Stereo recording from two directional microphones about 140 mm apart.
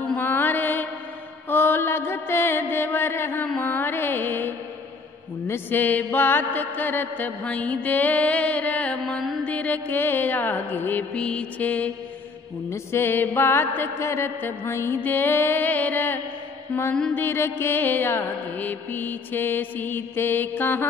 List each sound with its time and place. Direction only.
0.0 s mantra: 10° left (ahead or behind)